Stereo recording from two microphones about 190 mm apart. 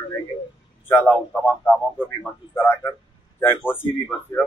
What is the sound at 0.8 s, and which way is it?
Speech, 10° left (ahead or behind).